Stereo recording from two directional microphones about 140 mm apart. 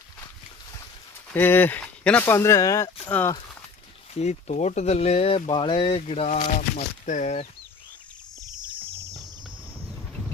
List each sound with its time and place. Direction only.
1.3 s speech: 15° left (ahead or behind)
4.1 s speech: 50° left (ahead or behind)
6.0 s speech: 50° left (ahead or behind)